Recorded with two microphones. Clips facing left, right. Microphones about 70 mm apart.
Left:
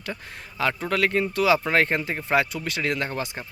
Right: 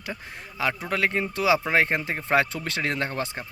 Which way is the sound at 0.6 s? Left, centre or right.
Centre.